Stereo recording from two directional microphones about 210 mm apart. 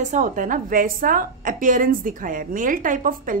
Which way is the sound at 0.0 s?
35° right (ahead or behind).